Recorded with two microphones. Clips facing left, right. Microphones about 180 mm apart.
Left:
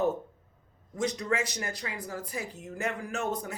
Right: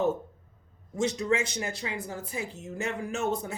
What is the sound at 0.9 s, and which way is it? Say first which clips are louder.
Speech: right 3 dB; 25° right (ahead or behind).